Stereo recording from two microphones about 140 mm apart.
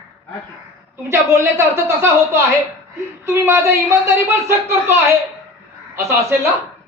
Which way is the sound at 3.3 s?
20° right (ahead or behind).